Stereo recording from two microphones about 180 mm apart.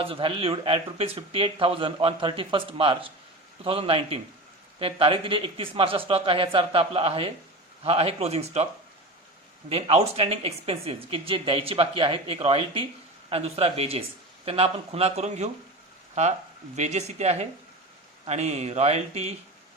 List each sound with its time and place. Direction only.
0.0 s speech: 30° right (ahead or behind)
9.6 s speech: 35° right (ahead or behind)
16.7 s speech: 40° right (ahead or behind)